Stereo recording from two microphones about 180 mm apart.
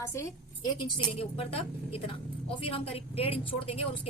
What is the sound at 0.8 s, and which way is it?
A woman's voice, 30° left (ahead or behind).